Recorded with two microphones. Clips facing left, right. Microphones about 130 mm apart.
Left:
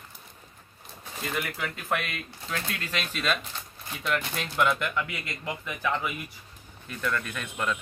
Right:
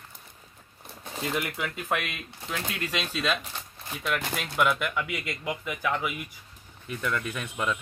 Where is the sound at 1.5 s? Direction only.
15° right (ahead or behind).